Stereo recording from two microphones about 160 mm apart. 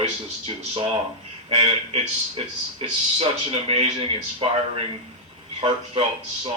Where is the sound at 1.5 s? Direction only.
35° right (ahead or behind).